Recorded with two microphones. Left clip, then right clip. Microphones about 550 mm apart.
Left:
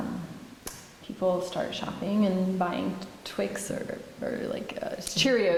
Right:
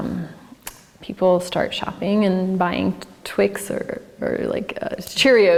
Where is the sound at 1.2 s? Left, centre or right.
Right.